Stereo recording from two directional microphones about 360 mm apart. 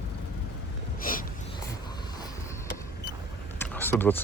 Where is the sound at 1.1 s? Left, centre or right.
Left.